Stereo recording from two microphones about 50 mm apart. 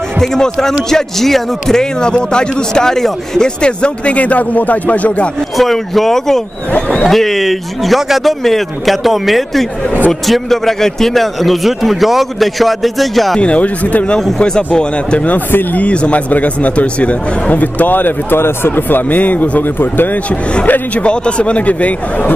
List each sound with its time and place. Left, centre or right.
0.2 s a man's voice: centre; by 5.3 s left
5.6 s a man's voice: centre
13.4 s speech: left
15.2 s speech: left
20.6 s speech: left
21.0 s speech: left